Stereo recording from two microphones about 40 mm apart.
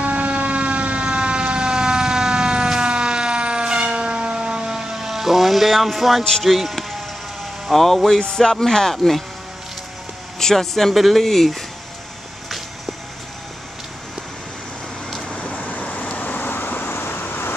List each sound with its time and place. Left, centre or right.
0.0 s emergency vehicle: right; by 6.2 s centre
6.4 s music: centre
7.7 s music: centre
8.6 s speech: centre
8.9 s music: centre
10.4 s speech: centre
15.9 s vehicle: left